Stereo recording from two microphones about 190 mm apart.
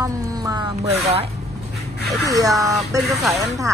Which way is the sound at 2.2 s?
20° right (ahead or behind).